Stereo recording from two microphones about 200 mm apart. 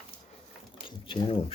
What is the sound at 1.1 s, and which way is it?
Speech, 25° left (ahead or behind).